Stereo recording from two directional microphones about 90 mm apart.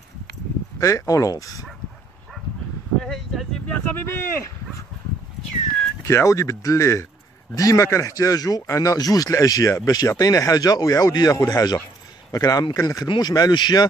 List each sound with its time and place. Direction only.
0.7 s speech: 35° left (ahead or behind)
3.0 s speech: 5° left (ahead or behind)
3.9 s speech: 25° left (ahead or behind)
6.0 s speech: 35° left (ahead or behind); by 13.8 s 55° left (ahead or behind)